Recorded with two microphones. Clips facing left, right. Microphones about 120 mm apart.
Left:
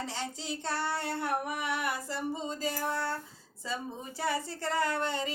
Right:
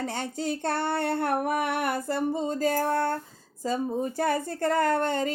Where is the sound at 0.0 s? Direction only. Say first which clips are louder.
Right 7 dB; 55° right (ahead or behind).